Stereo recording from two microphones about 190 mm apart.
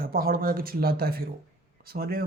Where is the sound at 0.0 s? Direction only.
50° right (ahead or behind).